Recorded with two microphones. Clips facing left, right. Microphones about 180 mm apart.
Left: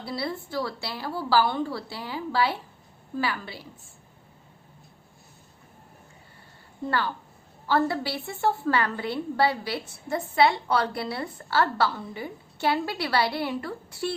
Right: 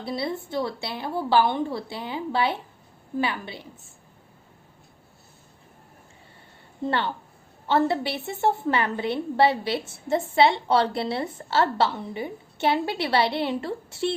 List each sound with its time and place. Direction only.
0.0 s a woman's voice: 20° right (ahead or behind)
6.8 s a woman's voice: 25° right (ahead or behind)